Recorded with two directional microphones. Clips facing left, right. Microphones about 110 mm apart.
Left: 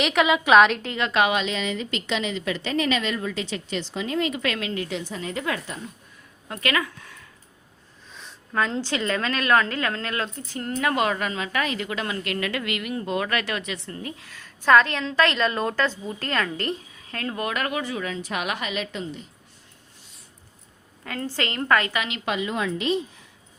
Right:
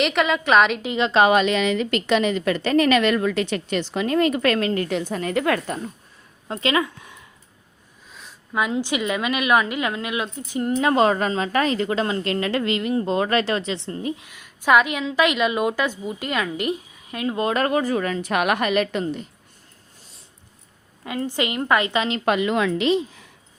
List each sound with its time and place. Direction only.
0.0 s a woman's voice: centre (ahead or behind)
0.9 s a woman's voice: 20° right (ahead or behind)
1.2 s a woman's voice: 50° right (ahead or behind)
6.5 s speech: 25° right (ahead or behind)
8.1 s a woman's voice: 5° right (ahead or behind)
17.4 s a woman's voice: 35° right (ahead or behind); by 19.2 s 60° right (ahead or behind)
21.0 s a woman's voice: 15° right (ahead or behind)
22.2 s speech: 55° right (ahead or behind)
22.4 s a woman's voice: 85° right